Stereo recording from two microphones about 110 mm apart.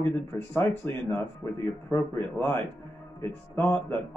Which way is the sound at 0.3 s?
20° left (ahead or behind).